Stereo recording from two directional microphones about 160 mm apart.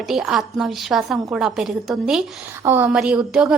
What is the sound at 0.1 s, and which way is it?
A woman's voice, centre (ahead or behind).